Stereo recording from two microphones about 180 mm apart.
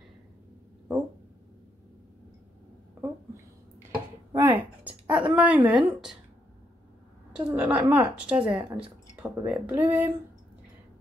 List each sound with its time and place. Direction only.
4.3 s a sound: 15° right (ahead or behind)
5.9 s a woman's voice: centre (ahead or behind)
7.3 s a woman's voice: 5° right (ahead or behind)